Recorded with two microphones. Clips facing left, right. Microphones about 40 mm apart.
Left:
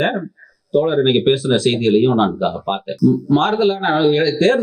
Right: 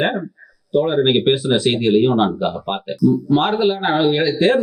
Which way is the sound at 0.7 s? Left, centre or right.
Centre.